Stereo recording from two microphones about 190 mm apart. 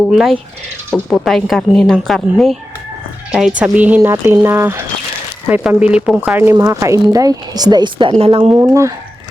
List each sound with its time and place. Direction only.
0.1 s a woman's voice: centre (ahead or behind); by 8.6 s 30° right (ahead or behind)
8.6 s speech: 15° right (ahead or behind)